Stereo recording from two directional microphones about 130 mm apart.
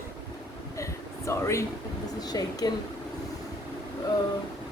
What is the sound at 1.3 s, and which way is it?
A woman's voice, 20° left (ahead or behind).